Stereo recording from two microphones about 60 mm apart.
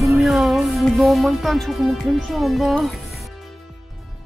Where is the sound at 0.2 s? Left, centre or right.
Centre.